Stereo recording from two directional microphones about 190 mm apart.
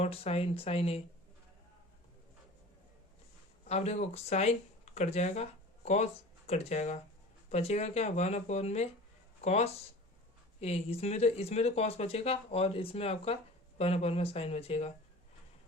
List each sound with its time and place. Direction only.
0.0 s speech: 35° left (ahead or behind)
3.7 s speech: 35° left (ahead or behind)